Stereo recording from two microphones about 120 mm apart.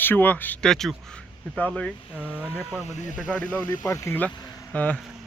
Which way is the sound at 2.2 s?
10° right (ahead or behind).